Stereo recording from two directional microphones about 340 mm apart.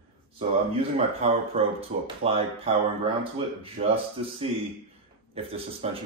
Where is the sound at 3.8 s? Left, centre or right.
Right.